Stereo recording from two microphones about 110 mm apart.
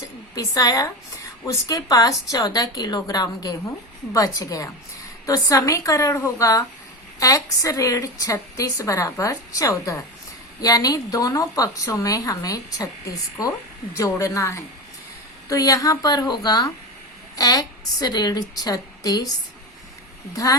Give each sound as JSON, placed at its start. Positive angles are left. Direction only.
{"t": 0.0, "sound": "a woman's voice", "side_deg": 35}
{"t": 20.3, "sound": "a woman's voice", "side_deg": 30}